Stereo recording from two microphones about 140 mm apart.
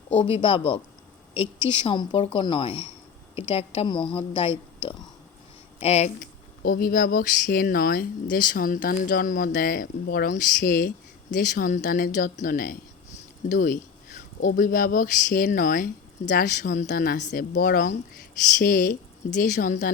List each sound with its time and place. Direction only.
0.2 s a woman's voice: 40° left (ahead or behind)
6.7 s a woman's voice: 90° left; by 19.9 s 75° left (ahead or behind)